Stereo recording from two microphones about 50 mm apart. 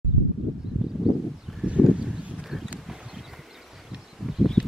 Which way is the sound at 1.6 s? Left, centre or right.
Centre.